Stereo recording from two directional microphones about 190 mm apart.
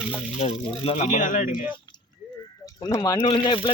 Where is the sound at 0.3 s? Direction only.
35° left (ahead or behind).